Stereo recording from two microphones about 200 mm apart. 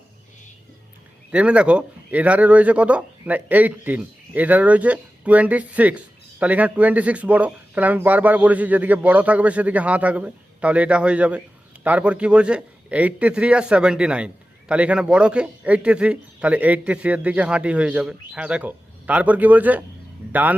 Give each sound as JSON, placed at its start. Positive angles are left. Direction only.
{"t": 1.3, "sound": "speech", "side_deg": -5}